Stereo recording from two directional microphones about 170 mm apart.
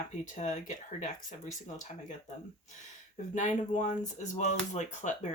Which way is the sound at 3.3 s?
45° left (ahead or behind).